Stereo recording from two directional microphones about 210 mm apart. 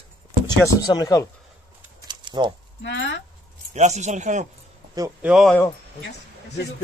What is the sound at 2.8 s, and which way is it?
Speech, 60° left (ahead or behind).